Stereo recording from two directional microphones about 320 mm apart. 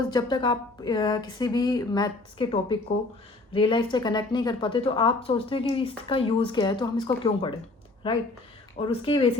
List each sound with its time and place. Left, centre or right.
0.1 s a woman's voice: centre